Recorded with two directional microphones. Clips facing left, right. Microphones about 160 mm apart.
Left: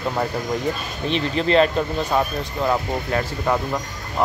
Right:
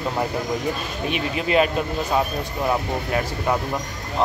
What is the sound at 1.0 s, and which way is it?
Speech, 10° right (ahead or behind).